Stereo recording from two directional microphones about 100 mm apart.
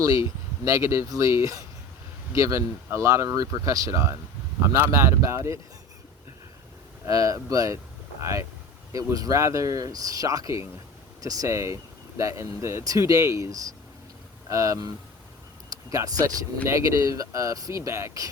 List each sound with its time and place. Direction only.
0.0 s speech: 35° right (ahead or behind)
7.0 s speech: 35° right (ahead or behind)